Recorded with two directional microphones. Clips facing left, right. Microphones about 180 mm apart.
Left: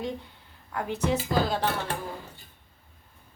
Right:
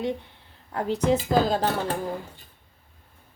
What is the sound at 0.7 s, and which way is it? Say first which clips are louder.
Speech: right 5 dB; 35° right (ahead or behind).